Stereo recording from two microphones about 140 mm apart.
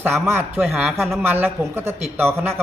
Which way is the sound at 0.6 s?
5° right (ahead or behind).